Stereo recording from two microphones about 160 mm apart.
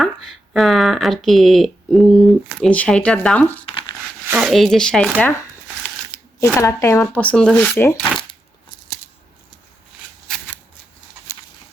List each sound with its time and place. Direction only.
0.0 s speech: centre (ahead or behind)
3.7 s crumpling: 35° left (ahead or behind)
4.3 s speech: 5° right (ahead or behind)
6.4 s speech: 20° left (ahead or behind)
10.2 s shuffling cards: 5° left (ahead or behind)